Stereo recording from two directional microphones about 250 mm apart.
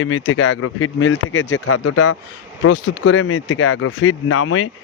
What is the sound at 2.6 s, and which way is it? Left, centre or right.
Speech, left.